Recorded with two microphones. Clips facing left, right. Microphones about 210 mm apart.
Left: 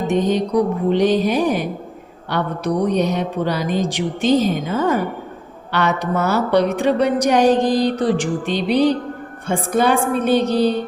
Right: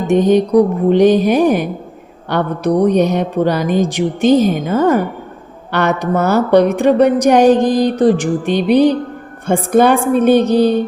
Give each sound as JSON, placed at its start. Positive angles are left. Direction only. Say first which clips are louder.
{"t": 0.1, "sound": "a woman's voice", "louder": "right 8 dB", "side_deg": -50}